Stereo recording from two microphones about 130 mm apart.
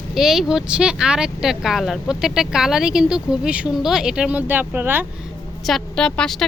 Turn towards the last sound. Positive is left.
turn(degrees=5)  # may be behind; listen again after turning